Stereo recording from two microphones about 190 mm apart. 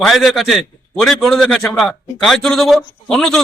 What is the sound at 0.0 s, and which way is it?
A man's voice, centre (ahead or behind).